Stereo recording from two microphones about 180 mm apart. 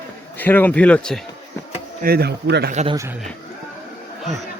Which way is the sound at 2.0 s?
60° right (ahead or behind).